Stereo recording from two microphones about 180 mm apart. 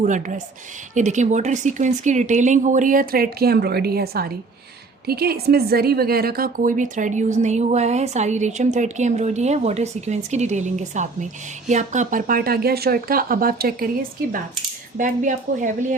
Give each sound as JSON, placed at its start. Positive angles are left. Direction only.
{"t": 0.0, "sound": "a woman's voice", "side_deg": -45}
{"t": 14.9, "sound": "speech", "side_deg": -45}